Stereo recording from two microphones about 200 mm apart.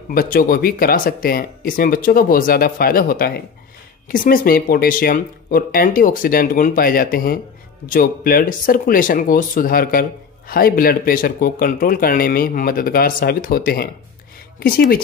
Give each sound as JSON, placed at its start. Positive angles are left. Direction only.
{"t": 0.1, "sound": "speech", "side_deg": 45}